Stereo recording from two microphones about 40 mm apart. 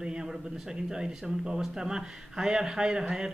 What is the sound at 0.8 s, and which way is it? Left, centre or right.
Speech, centre.